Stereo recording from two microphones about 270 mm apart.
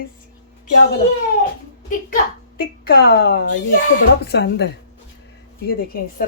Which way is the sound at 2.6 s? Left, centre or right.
Left.